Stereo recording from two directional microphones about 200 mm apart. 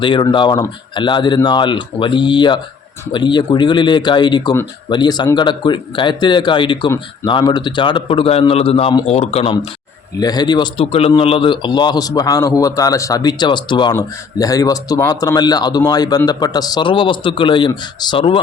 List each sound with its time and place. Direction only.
0.0 s a man's voice: 25° left (ahead or behind)